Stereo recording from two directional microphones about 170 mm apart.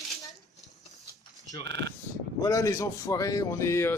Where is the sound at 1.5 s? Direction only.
20° left (ahead or behind).